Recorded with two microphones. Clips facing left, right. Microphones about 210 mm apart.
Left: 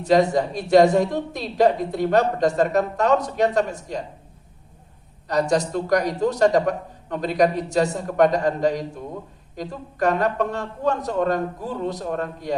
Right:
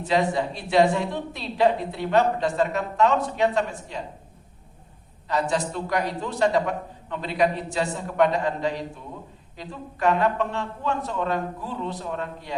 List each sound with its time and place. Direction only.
0.0 s a woman's voice: 40° left (ahead or behind)
5.3 s a woman's voice: 40° left (ahead or behind)